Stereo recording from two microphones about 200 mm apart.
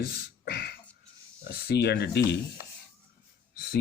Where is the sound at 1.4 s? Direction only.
55° left (ahead or behind).